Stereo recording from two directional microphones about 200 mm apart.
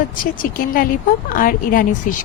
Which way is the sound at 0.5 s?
45° left (ahead or behind).